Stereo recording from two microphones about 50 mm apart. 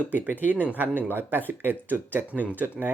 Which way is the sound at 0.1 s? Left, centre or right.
Right.